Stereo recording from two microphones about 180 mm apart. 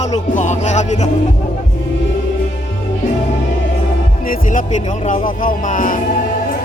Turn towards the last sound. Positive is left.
turn(degrees=45)  # may be behind; listen again after turning